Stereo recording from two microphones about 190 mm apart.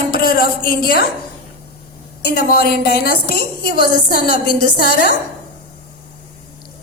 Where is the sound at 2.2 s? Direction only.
55° left (ahead or behind).